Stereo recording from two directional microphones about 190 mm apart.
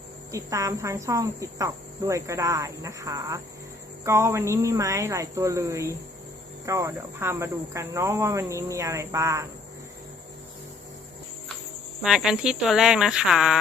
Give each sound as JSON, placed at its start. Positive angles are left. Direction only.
{"t": 0.3, "sound": "speech", "side_deg": -15}
{"t": 12.0, "sound": "speech", "side_deg": -5}